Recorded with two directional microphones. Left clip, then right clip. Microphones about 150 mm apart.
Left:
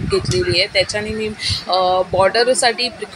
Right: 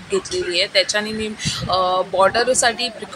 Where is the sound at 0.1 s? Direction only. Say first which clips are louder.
Left 3 dB; 20° left (ahead or behind).